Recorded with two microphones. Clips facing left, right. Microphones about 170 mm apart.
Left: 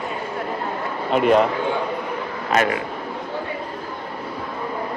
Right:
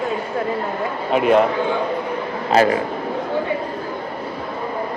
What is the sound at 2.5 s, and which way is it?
Speech, 30° right (ahead or behind).